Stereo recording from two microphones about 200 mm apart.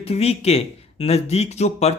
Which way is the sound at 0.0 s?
30° left (ahead or behind).